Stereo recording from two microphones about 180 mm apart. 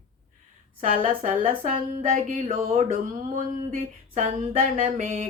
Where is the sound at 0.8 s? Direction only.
50° right (ahead or behind).